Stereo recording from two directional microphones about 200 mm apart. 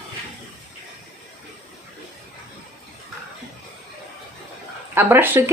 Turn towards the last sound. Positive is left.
turn(degrees=-10)  # may be behind; listen again after turning